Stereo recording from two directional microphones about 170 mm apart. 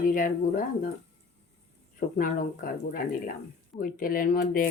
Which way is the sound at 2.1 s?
55° left (ahead or behind).